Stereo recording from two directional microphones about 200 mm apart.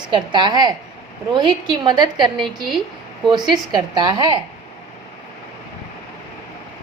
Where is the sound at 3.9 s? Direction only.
20° right (ahead or behind).